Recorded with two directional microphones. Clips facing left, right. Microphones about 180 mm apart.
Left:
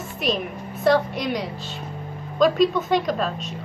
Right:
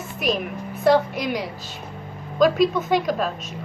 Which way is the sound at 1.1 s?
5° right (ahead or behind).